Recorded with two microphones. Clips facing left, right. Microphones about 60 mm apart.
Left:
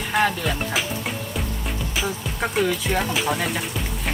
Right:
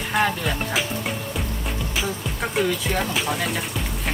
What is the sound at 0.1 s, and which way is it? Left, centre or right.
Speech, centre.